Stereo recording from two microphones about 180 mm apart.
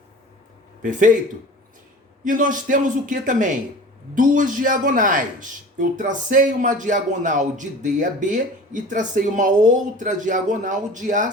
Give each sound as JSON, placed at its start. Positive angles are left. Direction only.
{"t": 0.8, "sound": "speech", "side_deg": -45}
{"t": 2.2, "sound": "speech", "side_deg": -45}